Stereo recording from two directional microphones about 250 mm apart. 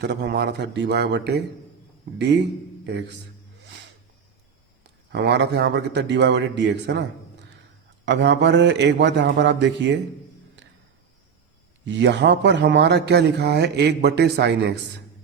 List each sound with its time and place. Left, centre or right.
0.0 s speech: right
4.8 s a man's voice: right
8.0 s speech: right
11.9 s speech: right